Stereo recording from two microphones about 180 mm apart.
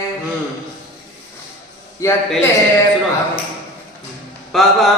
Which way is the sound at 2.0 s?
15° left (ahead or behind).